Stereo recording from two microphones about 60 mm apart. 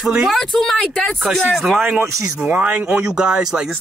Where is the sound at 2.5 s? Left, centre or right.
Right.